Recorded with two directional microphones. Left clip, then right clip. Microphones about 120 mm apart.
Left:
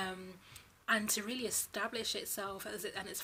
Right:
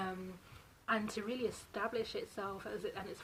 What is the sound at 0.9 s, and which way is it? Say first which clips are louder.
A woman's voice: left 3 dB; 20° left (ahead or behind).